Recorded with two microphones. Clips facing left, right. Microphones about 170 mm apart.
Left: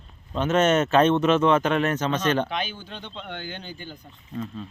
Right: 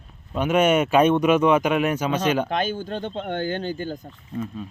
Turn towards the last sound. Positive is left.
turn(degrees=-10)  # may be behind; listen again after turning